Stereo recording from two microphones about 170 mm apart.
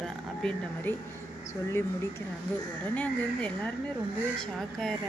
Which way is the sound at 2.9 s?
10° left (ahead or behind).